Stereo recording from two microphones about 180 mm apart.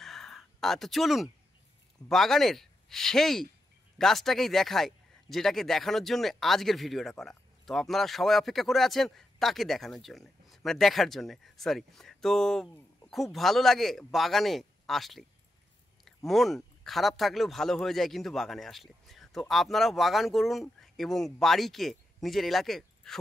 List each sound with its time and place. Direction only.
0.0 s a sound: centre (ahead or behind)
2.0 s speech: centre (ahead or behind)
16.3 s speech: centre (ahead or behind)